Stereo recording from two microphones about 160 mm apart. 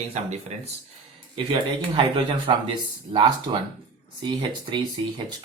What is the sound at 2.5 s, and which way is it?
Speech, 35° right (ahead or behind).